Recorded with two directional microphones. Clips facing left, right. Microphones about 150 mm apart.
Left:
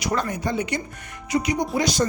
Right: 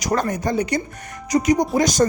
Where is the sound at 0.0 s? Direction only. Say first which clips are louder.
Right 4 dB; 45° right (ahead or behind).